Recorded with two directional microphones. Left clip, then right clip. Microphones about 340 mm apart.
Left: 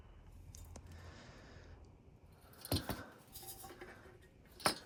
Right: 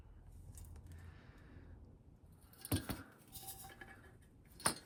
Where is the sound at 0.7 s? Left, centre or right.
Centre.